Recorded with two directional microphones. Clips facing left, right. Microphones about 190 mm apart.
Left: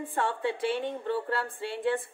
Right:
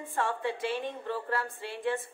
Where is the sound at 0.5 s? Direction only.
25° left (ahead or behind).